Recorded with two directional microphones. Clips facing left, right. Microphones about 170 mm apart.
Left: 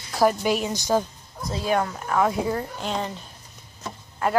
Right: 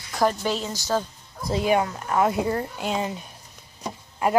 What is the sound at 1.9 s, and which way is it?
Speech, centre (ahead or behind).